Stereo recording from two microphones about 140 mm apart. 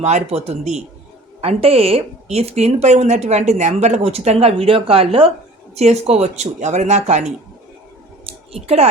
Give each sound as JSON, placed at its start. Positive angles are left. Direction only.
{"t": 0.0, "sound": "speech", "side_deg": -55}
{"t": 8.6, "sound": "speech", "side_deg": -50}